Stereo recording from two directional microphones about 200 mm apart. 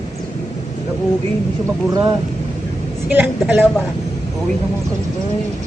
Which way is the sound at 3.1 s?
10° right (ahead or behind).